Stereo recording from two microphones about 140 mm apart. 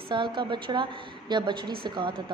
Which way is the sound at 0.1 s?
35° right (ahead or behind).